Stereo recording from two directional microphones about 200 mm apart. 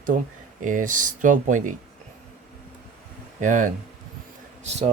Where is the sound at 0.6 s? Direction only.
40° right (ahead or behind).